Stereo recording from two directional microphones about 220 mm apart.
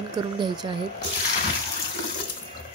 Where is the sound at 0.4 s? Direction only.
20° right (ahead or behind).